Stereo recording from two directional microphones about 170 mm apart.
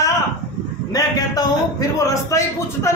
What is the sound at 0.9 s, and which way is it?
Speech, 20° left (ahead or behind).